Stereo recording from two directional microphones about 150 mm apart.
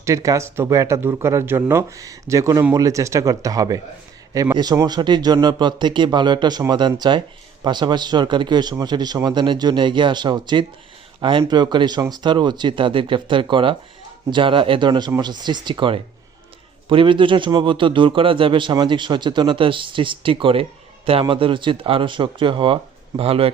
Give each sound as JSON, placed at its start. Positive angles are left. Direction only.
{"t": 0.0, "sound": "a man's voice", "side_deg": -20}